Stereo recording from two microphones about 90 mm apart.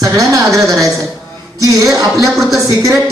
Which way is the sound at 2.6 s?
40° right (ahead or behind).